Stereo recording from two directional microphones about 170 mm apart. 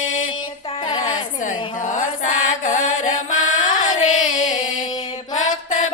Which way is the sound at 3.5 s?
45° left (ahead or behind).